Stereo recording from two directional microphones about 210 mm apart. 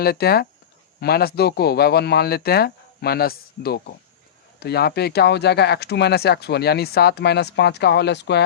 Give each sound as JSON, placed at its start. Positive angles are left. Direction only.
{"t": 0.0, "sound": "speech", "side_deg": 45}